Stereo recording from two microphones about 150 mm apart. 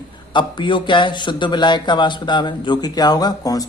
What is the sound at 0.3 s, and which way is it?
Speech, 30° left (ahead or behind).